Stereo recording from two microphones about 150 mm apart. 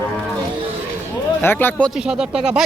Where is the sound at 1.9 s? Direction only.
5° right (ahead or behind).